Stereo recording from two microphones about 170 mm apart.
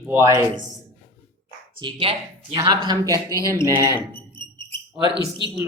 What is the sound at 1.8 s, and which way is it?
A woman's voice, 30° right (ahead or behind).